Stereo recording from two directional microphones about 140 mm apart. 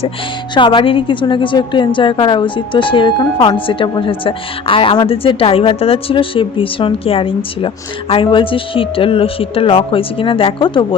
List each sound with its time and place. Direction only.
0.5 s speech: 35° left (ahead or behind)